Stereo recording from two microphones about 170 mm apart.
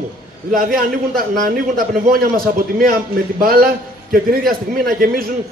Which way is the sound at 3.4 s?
60° right (ahead or behind).